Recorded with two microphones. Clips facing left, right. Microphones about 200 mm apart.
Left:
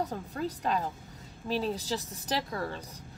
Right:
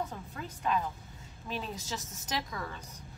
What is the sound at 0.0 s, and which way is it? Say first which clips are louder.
Speech: left 6 dB; 35° left (ahead or behind).